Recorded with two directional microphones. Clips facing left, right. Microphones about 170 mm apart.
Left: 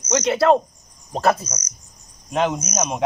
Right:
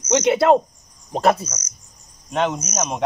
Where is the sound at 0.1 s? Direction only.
25° right (ahead or behind).